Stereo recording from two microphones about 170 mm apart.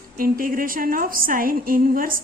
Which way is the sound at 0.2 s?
55° right (ahead or behind).